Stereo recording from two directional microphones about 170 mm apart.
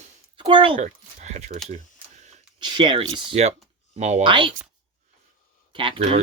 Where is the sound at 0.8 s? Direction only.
45° right (ahead or behind).